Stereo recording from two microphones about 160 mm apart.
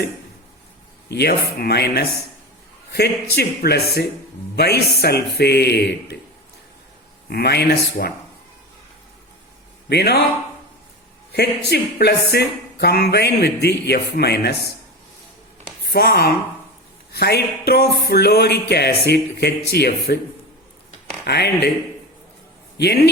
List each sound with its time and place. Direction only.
1.0 s a man's voice: 90° left
3.3 s speech: 90° left
7.3 s a man's voice: 85° left
8.0 s speech: 65° left (ahead or behind)
9.9 s speech: 90° left
11.3 s speech: 90° left
15.9 s speech: 90° left
21.2 s speech: 90° left